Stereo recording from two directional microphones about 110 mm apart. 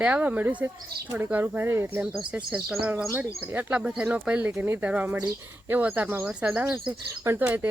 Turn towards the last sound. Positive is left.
turn(degrees=-15)  # may be behind; listen again after turning